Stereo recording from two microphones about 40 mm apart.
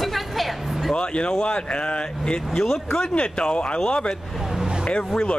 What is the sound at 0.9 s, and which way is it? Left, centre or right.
Speech, left.